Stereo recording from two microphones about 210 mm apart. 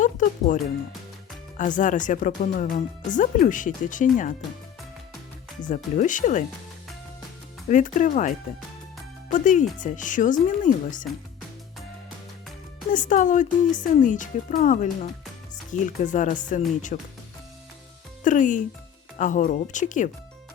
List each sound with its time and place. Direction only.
0.0 s speech: 40° left (ahead or behind)
5.6 s speech: 35° left (ahead or behind)
7.7 s speech: 35° left (ahead or behind)
12.9 s speech: 35° left (ahead or behind)
18.2 s speech: 40° left (ahead or behind)